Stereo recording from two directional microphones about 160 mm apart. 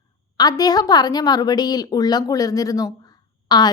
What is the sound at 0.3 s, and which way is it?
A woman's voice, 25° left (ahead or behind).